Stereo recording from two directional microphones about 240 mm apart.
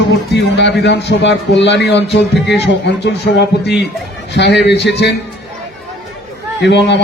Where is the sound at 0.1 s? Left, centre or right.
Left.